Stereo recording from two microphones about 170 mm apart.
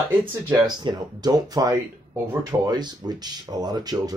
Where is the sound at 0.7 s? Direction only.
25° right (ahead or behind).